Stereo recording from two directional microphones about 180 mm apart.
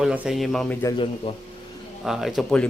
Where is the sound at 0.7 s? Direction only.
15° left (ahead or behind).